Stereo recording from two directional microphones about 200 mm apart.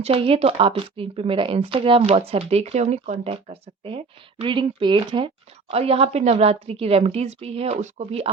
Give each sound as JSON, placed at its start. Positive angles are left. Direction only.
{"t": 0.0, "sound": "a woman's voice", "side_deg": -30}